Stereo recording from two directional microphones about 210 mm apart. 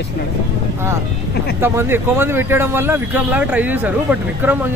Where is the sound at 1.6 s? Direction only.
10° right (ahead or behind).